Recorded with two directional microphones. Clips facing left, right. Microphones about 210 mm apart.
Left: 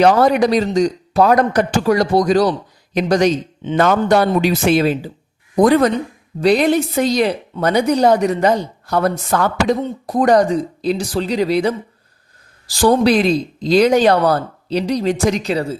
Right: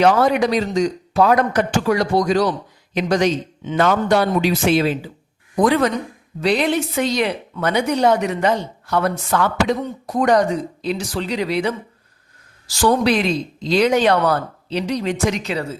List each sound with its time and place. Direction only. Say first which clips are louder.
0.0 s a woman's voice: left 3 dB; 40° left (ahead or behind)
12.7 s a woman's voice: left 4 dB; 35° left (ahead or behind)